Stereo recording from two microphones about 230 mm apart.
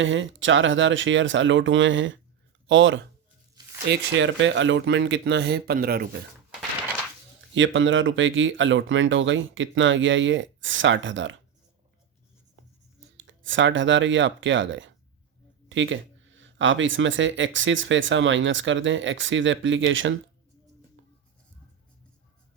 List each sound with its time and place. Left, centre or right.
0.0 s speech: right
7.5 s speech: right
13.1 s speech: right